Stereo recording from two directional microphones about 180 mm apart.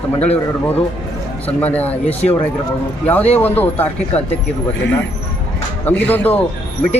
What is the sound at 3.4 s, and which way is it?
Speech, 10° left (ahead or behind).